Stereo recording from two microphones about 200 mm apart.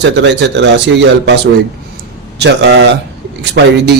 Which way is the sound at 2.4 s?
60° right (ahead or behind).